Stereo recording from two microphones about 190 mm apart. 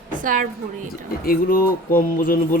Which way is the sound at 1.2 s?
50° left (ahead or behind).